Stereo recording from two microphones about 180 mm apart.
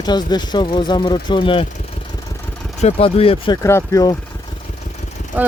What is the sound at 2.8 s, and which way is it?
Speech, 35° left (ahead or behind).